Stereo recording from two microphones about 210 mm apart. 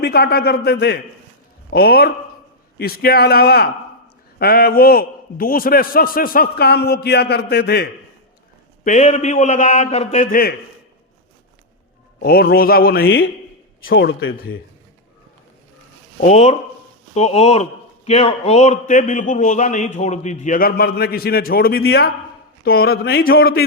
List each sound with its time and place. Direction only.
0.0 s a man's voice: 50° left (ahead or behind)
8.8 s a man's voice: 35° left (ahead or behind)
12.2 s a man's voice: 45° left (ahead or behind)
13.9 s a man's voice: 60° left (ahead or behind)
16.2 s a man's voice: 35° left (ahead or behind)